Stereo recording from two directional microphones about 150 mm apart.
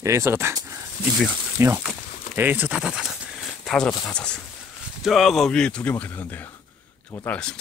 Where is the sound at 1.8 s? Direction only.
10° right (ahead or behind).